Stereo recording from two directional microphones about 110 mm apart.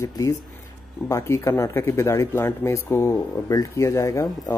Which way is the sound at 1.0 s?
25° left (ahead or behind).